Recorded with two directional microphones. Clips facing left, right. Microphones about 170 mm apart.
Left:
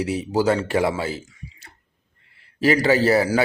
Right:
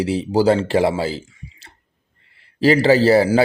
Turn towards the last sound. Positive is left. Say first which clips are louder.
# right 4 dB
turn(degrees=-30)  # may be behind; listen again after turning